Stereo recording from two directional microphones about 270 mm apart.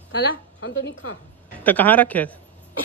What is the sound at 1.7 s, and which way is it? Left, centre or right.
Speech, centre.